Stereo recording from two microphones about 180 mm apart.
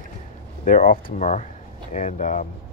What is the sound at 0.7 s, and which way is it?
Speech, 50° left (ahead or behind).